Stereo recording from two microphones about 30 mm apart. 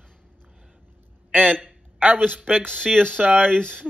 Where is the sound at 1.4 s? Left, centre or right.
Left.